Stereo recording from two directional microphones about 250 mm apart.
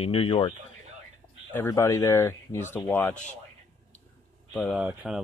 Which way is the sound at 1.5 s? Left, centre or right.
Centre.